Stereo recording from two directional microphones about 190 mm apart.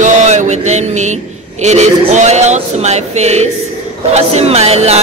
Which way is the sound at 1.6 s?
35° right (ahead or behind).